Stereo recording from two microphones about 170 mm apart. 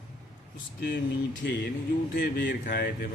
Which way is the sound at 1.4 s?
90° left.